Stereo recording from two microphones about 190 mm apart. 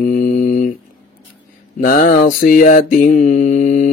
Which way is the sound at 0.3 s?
45° left (ahead or behind).